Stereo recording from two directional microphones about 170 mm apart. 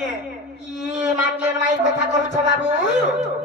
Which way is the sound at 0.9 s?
5° right (ahead or behind).